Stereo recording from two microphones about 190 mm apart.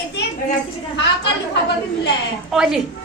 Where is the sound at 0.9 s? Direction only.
65° left (ahead or behind).